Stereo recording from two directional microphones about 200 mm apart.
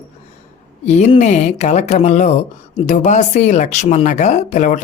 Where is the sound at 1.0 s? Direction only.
35° left (ahead or behind).